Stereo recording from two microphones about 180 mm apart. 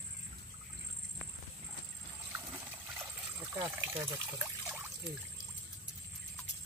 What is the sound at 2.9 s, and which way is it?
Trickle, 10° right (ahead or behind).